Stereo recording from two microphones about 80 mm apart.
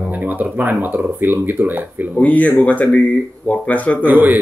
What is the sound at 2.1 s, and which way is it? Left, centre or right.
Speech, centre.